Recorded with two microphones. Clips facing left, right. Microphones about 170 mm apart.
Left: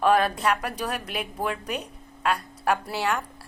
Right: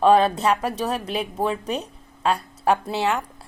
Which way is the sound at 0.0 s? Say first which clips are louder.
Right 5 dB; 25° right (ahead or behind).